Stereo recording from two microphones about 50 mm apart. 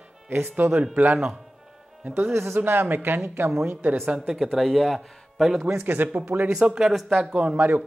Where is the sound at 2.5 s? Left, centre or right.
Right.